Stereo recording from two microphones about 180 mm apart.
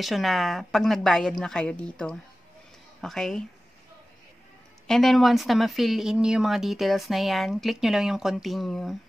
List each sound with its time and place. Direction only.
0.0 s speech: centre (ahead or behind)
4.8 s speech: centre (ahead or behind)